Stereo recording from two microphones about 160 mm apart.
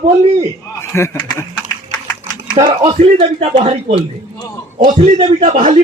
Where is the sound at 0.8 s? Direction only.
15° left (ahead or behind).